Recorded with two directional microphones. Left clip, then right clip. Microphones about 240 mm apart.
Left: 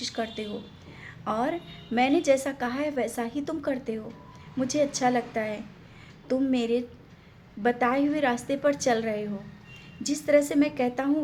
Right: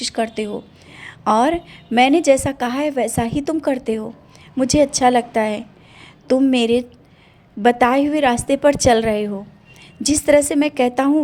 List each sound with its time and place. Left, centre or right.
0.0 s a woman's voice: right